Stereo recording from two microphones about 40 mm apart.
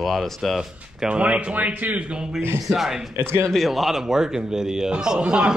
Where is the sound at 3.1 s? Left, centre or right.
Right.